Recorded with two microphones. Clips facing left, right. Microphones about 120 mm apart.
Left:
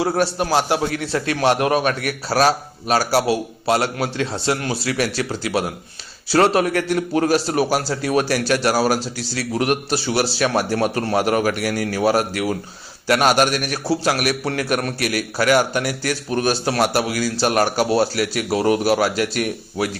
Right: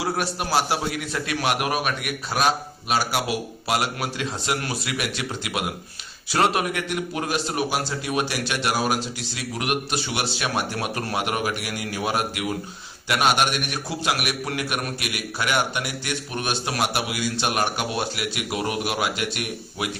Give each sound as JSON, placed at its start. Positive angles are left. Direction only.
{"t": 0.0, "sound": "a man's voice", "side_deg": 30}